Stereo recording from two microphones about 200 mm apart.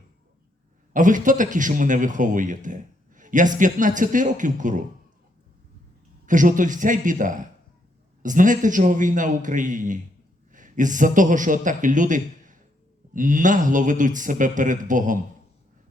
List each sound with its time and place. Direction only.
0.9 s speech: 40° right (ahead or behind)
6.2 s a man's voice: 40° right (ahead or behind)